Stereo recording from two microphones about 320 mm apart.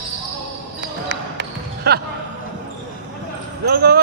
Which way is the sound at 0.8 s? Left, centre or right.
Right.